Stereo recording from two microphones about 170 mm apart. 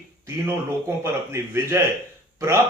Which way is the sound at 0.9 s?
15° right (ahead or behind).